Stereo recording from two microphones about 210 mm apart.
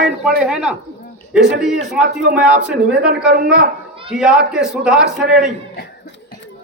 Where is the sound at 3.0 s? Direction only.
45° right (ahead or behind).